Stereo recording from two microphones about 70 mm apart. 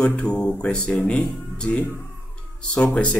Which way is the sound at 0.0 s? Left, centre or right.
Centre.